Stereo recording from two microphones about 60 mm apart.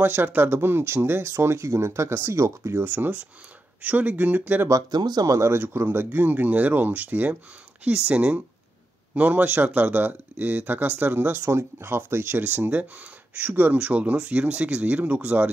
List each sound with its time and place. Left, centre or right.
0.0 s speech: right
2.8 s speech: right
4.6 s speech: right
5.9 s speech: right